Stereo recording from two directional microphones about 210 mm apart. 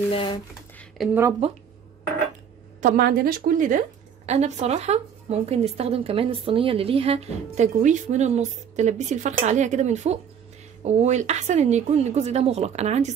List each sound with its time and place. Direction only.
0.1 s speech: 25° left (ahead or behind)
1.0 s speech: centre (ahead or behind)
1.4 s speech: 30° right (ahead or behind)
2.8 s a woman's voice: 45° right (ahead or behind)